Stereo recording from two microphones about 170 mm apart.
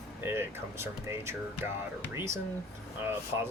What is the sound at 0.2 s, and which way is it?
Speech, 15° right (ahead or behind).